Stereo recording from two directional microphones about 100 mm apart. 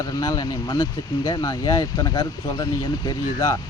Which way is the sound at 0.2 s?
40° left (ahead or behind).